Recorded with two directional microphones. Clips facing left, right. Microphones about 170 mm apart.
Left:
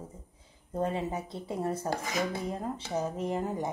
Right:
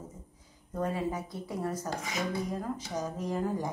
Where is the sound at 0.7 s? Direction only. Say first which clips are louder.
Left 1 dB; 25° left (ahead or behind).